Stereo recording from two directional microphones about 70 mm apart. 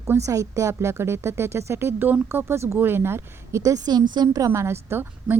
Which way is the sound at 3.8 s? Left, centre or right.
Right.